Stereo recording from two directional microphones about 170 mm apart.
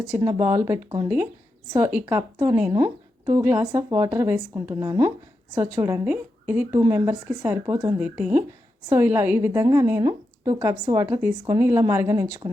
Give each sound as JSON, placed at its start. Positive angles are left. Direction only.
{"t": 0.0, "sound": "speech", "side_deg": -20}